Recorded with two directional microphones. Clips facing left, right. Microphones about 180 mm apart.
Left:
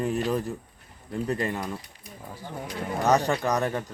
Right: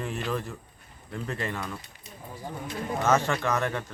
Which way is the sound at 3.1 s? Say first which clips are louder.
Left 2 dB; 35° left (ahead or behind).